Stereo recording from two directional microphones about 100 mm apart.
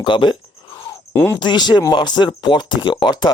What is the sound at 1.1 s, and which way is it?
Speech, 20° left (ahead or behind).